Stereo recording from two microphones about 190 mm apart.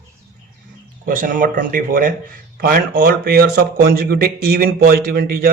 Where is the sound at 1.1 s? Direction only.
45° right (ahead or behind).